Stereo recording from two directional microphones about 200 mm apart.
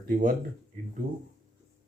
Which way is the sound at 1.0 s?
40° right (ahead or behind).